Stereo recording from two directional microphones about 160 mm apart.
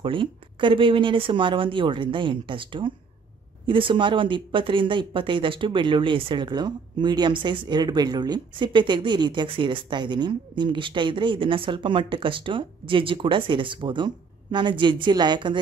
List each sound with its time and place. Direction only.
0.0 s speech: 30° right (ahead or behind)